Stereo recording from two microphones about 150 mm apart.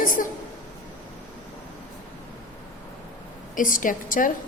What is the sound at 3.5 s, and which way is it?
Speech, 65° left (ahead or behind).